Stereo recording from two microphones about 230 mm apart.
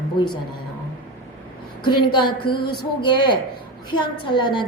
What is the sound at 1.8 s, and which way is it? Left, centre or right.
A woman's voice, centre.